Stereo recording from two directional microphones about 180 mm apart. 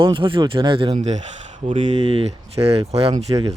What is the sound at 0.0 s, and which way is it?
Speech, 30° right (ahead or behind).